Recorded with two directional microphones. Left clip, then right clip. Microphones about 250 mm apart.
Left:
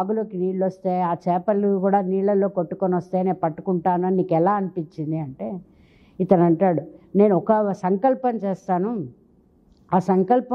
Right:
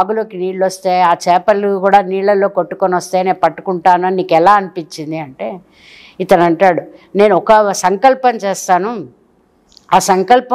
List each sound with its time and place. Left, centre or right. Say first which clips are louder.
0.1 s speech: right 7 dB; centre
3.6 s speech: right 9 dB; right
3.9 s speech: right 11 dB; centre
10.0 s speech: right 7 dB; centre